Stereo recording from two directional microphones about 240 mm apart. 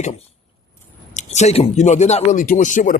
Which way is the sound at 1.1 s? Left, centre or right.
Left.